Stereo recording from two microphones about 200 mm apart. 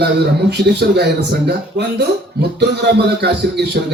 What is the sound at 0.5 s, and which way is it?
Music, 55° right (ahead or behind).